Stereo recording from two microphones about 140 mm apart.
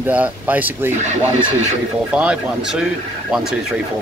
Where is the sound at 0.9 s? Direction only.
55° right (ahead or behind).